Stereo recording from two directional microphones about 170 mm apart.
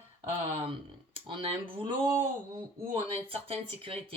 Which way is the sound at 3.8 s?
35° right (ahead or behind).